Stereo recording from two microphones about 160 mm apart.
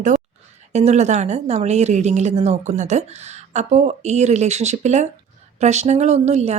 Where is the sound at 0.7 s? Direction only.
45° right (ahead or behind).